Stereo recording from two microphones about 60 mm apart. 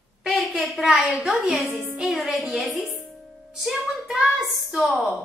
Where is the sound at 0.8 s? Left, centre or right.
Centre.